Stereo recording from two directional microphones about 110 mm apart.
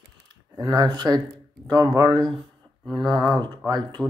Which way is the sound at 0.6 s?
35° right (ahead or behind).